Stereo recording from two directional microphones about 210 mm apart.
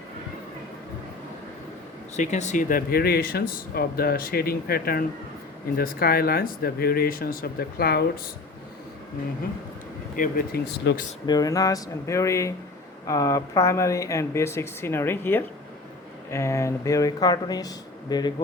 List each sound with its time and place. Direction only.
2.1 s speech: 35° left (ahead or behind)
10.2 s speech: 45° left (ahead or behind)
11.3 s speech: 15° left (ahead or behind)